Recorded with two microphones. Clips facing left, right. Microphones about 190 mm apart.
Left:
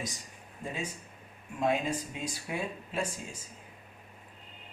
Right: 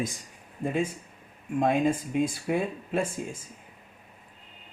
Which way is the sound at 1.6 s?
50° right (ahead or behind).